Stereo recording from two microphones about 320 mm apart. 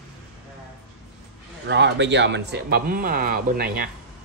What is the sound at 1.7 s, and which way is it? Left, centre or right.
Speech, right.